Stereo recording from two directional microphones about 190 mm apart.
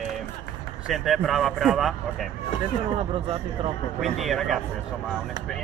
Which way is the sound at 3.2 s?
30° right (ahead or behind).